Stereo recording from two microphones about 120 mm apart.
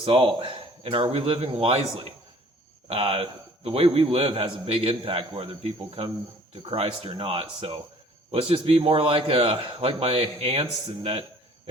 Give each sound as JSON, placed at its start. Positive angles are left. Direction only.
{"t": 0.0, "sound": "speech", "side_deg": -45}
{"t": 6.5, "sound": "speech", "side_deg": -50}